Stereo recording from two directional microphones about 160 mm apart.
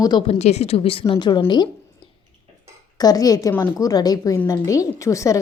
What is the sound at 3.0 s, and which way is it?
A woman's voice, 25° left (ahead or behind).